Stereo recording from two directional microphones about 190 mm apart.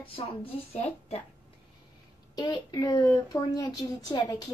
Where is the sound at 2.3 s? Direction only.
20° left (ahead or behind).